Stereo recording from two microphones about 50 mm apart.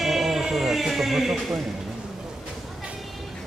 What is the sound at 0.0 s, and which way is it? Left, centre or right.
Music, centre.